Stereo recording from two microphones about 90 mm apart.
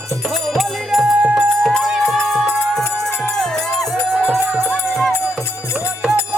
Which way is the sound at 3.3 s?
5° left (ahead or behind).